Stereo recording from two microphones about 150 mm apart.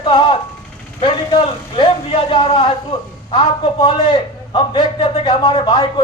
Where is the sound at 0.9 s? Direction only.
35° left (ahead or behind).